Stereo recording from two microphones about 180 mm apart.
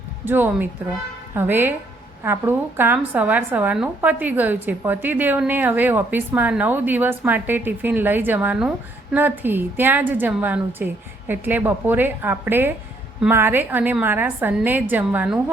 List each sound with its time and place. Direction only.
0.3 s a woman's voice: 10° right (ahead or behind)